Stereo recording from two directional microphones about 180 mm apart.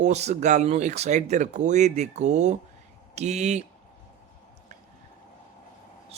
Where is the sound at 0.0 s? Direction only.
40° right (ahead or behind).